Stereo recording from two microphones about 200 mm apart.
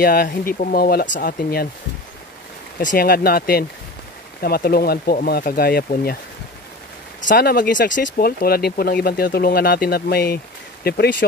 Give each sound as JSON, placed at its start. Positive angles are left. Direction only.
{"t": 0.0, "sound": "speech", "side_deg": 50}
{"t": 2.8, "sound": "speech", "side_deg": 45}
{"t": 7.2, "sound": "speech", "side_deg": 50}